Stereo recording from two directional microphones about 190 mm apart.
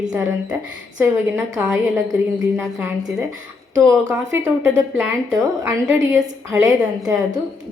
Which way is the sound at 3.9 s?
15° right (ahead or behind).